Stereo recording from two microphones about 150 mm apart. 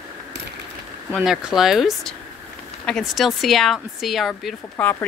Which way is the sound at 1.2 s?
5° right (ahead or behind).